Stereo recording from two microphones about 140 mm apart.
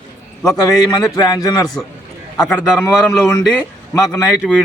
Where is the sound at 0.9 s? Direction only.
30° left (ahead or behind).